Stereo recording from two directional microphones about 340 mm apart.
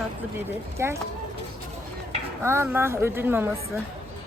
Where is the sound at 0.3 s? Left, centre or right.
Centre.